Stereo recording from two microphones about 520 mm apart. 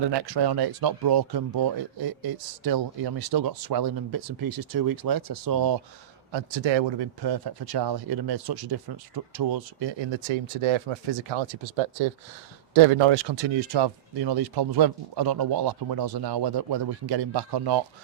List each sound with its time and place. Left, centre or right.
0.1 s speech: right
6.3 s speech: right
10.6 s speech: right